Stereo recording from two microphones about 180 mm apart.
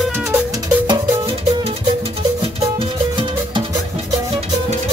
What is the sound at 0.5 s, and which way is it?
Music, 25° right (ahead or behind).